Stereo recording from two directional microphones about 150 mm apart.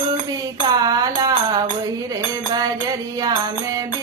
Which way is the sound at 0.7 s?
25° right (ahead or behind).